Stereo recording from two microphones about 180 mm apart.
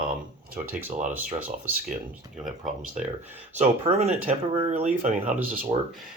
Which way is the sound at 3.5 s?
40° right (ahead or behind).